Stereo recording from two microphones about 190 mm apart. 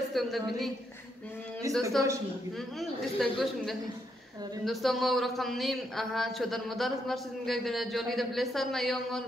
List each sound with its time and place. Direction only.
0.1 s a sound: centre (ahead or behind)
2.0 s a man's voice: 15° right (ahead or behind)
2.8 s a man's voice: centre (ahead or behind)